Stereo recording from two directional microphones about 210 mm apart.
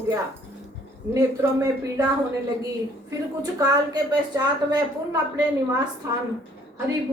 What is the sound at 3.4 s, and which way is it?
A woman's voice, 20° right (ahead or behind).